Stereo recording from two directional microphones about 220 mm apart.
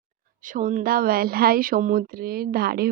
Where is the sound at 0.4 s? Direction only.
35° right (ahead or behind).